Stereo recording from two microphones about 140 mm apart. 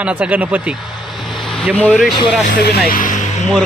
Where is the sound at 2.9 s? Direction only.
70° left (ahead or behind).